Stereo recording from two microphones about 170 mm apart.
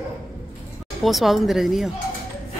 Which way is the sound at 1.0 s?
Centre (ahead or behind).